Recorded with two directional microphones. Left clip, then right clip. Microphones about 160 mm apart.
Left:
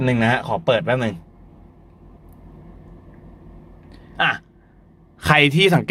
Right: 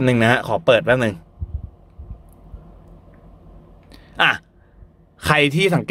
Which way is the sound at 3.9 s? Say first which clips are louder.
Right 3 dB; 15° right (ahead or behind).